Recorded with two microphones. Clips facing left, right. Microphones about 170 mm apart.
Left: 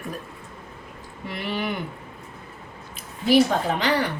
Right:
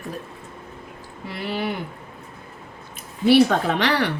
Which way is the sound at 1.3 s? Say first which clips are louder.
Right 1 dB; 35° right (ahead or behind).